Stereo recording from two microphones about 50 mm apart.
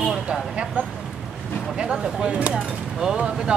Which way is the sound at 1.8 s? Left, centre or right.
Centre.